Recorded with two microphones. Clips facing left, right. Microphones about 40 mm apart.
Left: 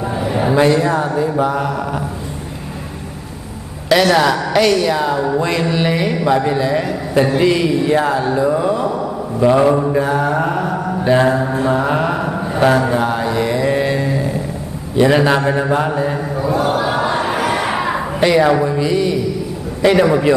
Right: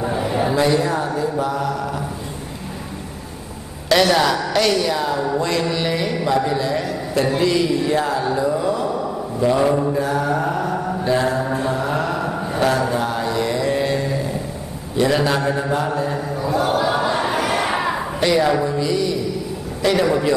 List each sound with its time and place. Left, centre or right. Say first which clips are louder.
0.0 s a sound: left 2 dB; centre
0.6 s speech: left 6 dB; left
3.9 s speech: left 3 dB; centre
11.2 s mantra: left 5 dB; centre
11.7 s mantra: left 5 dB; left
15.0 s a man's voice: left 5 dB; left